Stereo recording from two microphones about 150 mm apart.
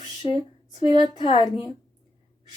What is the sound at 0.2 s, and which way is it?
A woman's voice, 40° left (ahead or behind).